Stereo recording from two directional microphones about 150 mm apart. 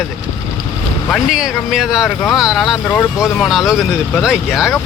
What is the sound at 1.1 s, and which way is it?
Speech, 5° right (ahead or behind).